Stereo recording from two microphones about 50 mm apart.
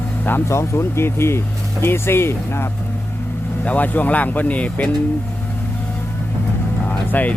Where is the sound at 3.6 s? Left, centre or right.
Left.